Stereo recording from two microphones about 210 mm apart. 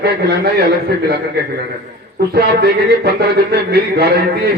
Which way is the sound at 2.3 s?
50° right (ahead or behind).